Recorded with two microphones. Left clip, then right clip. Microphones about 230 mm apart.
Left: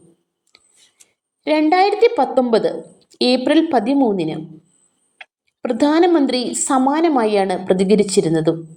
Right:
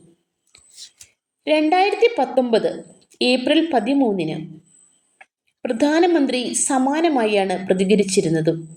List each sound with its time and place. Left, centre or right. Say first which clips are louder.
1.5 s a woman's voice: left 2 dB; centre
5.6 s a woman's voice: left 2 dB; centre